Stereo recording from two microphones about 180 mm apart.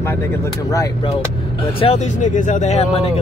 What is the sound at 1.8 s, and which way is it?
Speech, 40° left (ahead or behind).